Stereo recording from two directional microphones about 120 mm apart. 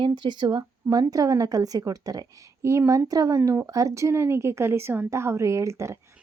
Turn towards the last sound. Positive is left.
turn(degrees=-25)  # may be behind; listen again after turning